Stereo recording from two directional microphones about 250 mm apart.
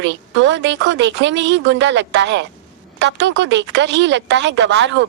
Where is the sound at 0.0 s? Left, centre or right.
Right.